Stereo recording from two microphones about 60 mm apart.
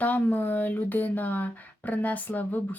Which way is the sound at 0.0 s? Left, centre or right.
Left.